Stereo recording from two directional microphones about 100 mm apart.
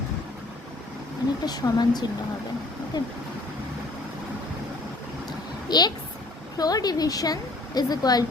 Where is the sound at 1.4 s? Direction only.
45° left (ahead or behind).